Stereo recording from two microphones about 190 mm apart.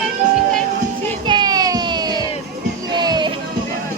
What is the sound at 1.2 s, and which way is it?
Music, 25° right (ahead or behind).